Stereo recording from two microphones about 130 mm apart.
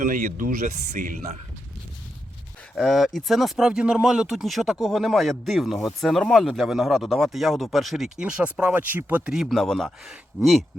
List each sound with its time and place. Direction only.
0.0 s speech: 80° right
2.7 s speech: centre (ahead or behind)
9.3 s speech: centre (ahead or behind)